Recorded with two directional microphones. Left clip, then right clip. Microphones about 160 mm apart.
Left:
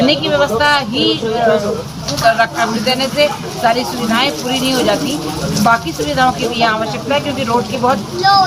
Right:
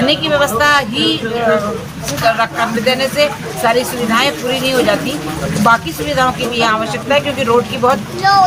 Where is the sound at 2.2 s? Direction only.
30° right (ahead or behind).